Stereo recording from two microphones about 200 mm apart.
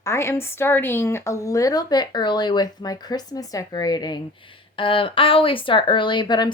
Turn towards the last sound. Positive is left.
turn(degrees=20)  # may be behind; listen again after turning